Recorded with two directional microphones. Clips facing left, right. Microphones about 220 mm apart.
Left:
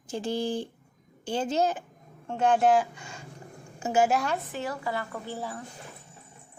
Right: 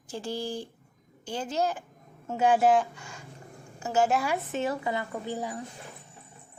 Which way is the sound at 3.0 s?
25° left (ahead or behind).